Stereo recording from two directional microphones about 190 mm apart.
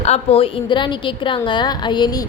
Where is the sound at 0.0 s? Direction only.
35° left (ahead or behind).